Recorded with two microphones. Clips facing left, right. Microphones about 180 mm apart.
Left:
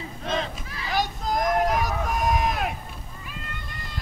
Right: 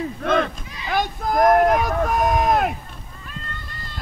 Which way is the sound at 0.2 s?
60° right (ahead or behind).